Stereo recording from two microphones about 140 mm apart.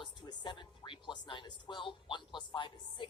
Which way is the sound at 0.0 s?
35° left (ahead or behind).